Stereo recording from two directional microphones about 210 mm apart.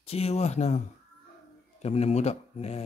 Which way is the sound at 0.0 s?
30° left (ahead or behind).